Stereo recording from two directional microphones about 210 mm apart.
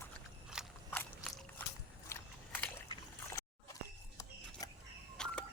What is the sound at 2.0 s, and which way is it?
Biting, 5° left (ahead or behind).